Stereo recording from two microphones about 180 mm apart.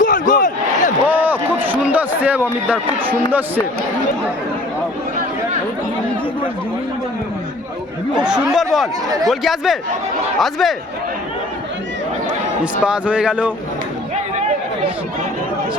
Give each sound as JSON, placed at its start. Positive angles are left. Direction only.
{"t": 0.0, "sound": "crowd", "side_deg": 45}
{"t": 1.0, "sound": "a sound", "side_deg": -10}
{"t": 8.1, "sound": "a man's voice", "side_deg": -5}
{"t": 9.0, "sound": "speech", "side_deg": -20}
{"t": 9.3, "sound": "a man's voice", "side_deg": 0}
{"t": 12.8, "sound": "a man's voice", "side_deg": -5}